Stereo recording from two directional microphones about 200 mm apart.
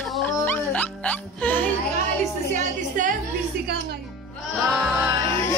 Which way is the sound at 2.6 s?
40° right (ahead or behind).